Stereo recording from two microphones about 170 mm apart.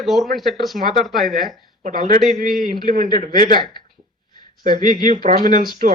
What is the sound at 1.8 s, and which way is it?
A man's voice, 55° right (ahead or behind).